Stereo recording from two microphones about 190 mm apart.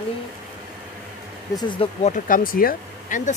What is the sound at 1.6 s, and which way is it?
Speech, 25° left (ahead or behind).